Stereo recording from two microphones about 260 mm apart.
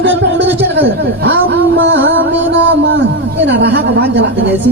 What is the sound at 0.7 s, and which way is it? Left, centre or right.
Speech, right.